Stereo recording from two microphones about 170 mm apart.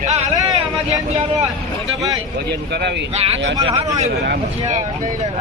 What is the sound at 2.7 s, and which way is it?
Speech, 75° right (ahead or behind).